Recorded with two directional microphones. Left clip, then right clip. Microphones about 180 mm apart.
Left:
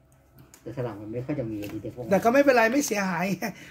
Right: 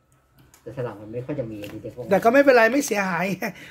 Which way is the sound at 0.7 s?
15° right (ahead or behind).